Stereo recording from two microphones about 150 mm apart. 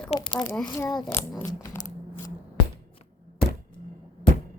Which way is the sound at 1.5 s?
25° left (ahead or behind).